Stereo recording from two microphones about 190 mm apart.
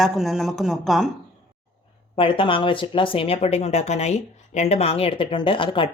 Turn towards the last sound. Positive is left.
turn(degrees=25)  # may be behind; listen again after turning